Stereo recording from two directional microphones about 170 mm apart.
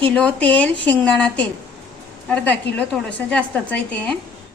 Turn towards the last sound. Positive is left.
turn(degrees=5)  # may be behind; listen again after turning